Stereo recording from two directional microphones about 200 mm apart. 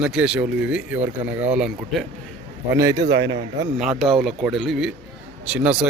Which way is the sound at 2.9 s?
60° right (ahead or behind).